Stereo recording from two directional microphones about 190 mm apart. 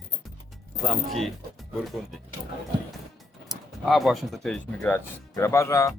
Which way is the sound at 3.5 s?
Centre (ahead or behind).